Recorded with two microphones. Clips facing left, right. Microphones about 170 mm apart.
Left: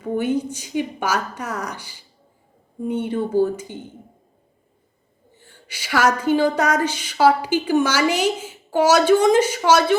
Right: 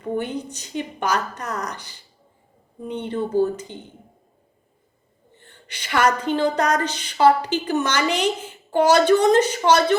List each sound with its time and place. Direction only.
0.0 s a woman's voice: 5° left (ahead or behind)
5.3 s a woman's voice: 5° left (ahead or behind)